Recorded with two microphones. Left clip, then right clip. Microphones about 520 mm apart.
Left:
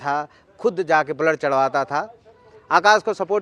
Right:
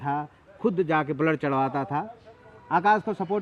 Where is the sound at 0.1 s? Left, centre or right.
Left.